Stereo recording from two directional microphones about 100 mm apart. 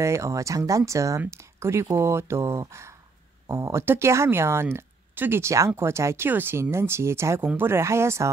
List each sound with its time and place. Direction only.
0.0 s speech: 30° right (ahead or behind)